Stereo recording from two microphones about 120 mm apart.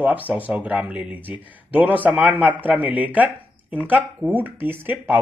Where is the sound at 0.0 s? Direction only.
15° right (ahead or behind).